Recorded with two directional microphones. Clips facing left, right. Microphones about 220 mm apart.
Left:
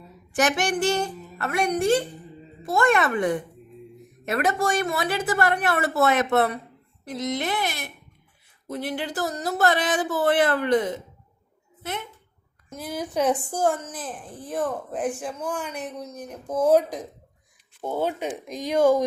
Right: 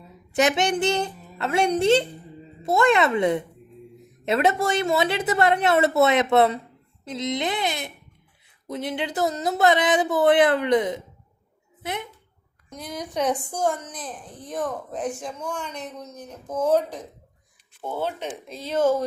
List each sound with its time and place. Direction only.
0.3 s a woman's voice: 20° right (ahead or behind)
12.7 s a woman's voice: 5° left (ahead or behind)